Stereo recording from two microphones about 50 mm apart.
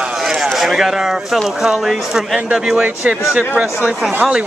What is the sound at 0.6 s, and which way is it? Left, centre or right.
Speech, centre.